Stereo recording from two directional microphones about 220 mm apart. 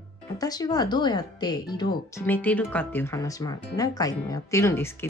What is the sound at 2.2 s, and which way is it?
Speech, 10° left (ahead or behind).